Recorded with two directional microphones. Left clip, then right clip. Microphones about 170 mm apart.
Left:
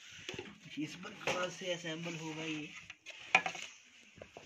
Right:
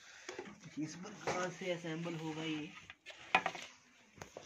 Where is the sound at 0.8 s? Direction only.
5° right (ahead or behind).